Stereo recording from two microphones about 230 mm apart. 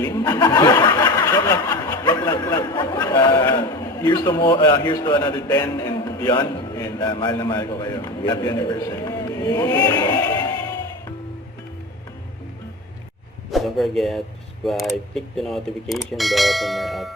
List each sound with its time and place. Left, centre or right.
0.0 s a man's voice: centre
13.5 s speech: centre